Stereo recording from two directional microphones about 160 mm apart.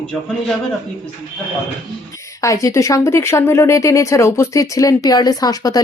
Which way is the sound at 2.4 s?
20° left (ahead or behind).